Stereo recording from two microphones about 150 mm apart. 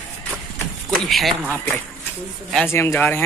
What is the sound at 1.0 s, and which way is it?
Speech, centre (ahead or behind).